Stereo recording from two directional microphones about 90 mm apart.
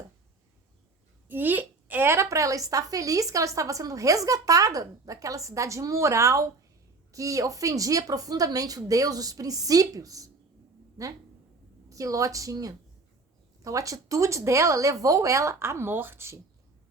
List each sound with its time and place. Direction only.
1.3 s a woman's voice: 20° right (ahead or behind)